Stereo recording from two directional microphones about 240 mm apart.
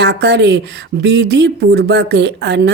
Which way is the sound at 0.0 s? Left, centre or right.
Right.